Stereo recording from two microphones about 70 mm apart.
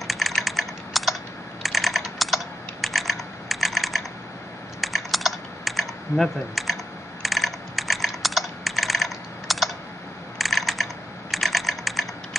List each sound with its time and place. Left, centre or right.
0.0 s typing: centre
7.2 s computer keyboard: centre
11.3 s typing: centre